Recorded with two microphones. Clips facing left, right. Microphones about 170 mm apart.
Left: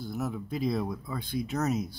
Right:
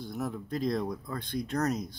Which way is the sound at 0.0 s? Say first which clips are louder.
Left 1 dB; centre (ahead or behind).